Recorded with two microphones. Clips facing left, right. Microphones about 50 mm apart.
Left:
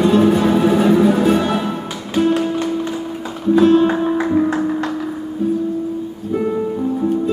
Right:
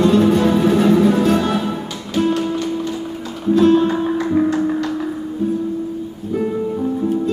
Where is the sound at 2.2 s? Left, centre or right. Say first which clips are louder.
Left 2 dB; centre.